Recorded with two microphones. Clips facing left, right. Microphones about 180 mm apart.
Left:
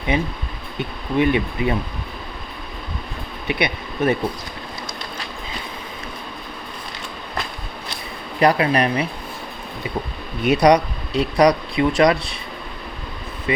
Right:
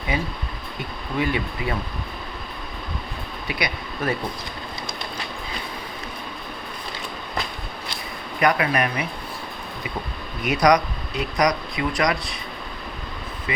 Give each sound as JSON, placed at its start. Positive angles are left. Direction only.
{"t": 0.1, "sound": "speech", "side_deg": 20}
{"t": 3.4, "sound": "speech", "side_deg": 25}
{"t": 8.4, "sound": "speech", "side_deg": 30}
{"t": 10.4, "sound": "speech", "side_deg": 30}